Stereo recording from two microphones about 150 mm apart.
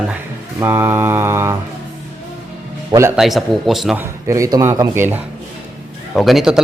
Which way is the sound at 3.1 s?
Centre (ahead or behind).